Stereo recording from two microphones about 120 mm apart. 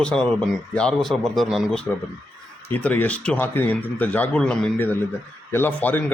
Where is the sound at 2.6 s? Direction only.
15° left (ahead or behind).